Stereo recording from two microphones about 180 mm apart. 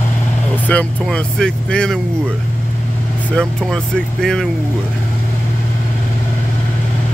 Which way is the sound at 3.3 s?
5° left (ahead or behind).